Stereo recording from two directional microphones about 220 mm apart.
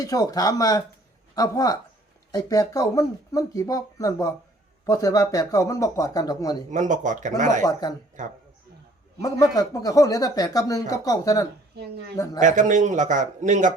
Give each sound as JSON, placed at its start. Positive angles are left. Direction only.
{"t": 0.0, "sound": "speech", "side_deg": 15}
{"t": 6.7, "sound": "a man's voice", "side_deg": -35}
{"t": 7.6, "sound": "speech", "side_deg": 15}
{"t": 8.2, "sound": "a man's voice", "side_deg": -35}
{"t": 9.2, "sound": "speech", "side_deg": 15}
{"t": 12.4, "sound": "a man's voice", "side_deg": -35}